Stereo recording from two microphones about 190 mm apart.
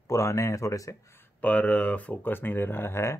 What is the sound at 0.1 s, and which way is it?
Speech, 15° left (ahead or behind).